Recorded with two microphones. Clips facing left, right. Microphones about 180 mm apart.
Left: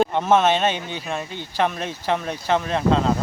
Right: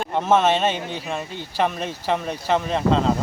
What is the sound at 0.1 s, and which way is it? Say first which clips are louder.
Speech: even; centre (ahead or behind).